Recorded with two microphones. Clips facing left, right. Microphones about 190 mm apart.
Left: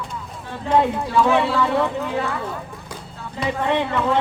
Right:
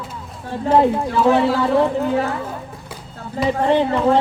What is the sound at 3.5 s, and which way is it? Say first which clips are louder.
Speech: right 5 dB; 35° right (ahead or behind).